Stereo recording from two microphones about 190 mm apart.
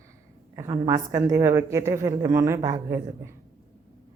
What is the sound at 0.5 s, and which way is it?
A woman's voice, 15° right (ahead or behind).